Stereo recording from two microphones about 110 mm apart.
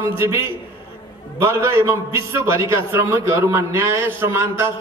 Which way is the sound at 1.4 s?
25° right (ahead or behind).